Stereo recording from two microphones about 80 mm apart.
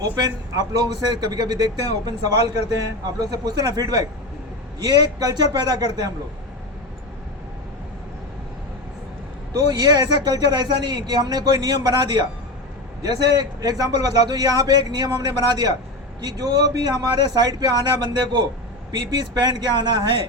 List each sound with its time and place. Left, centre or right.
0.2 s a man's voice: right
9.5 s a man's voice: right